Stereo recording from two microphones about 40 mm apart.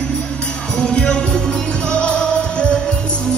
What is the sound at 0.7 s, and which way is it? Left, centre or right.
Music, left.